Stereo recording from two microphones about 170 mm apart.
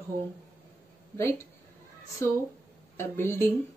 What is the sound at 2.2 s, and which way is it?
Speech, 15° left (ahead or behind).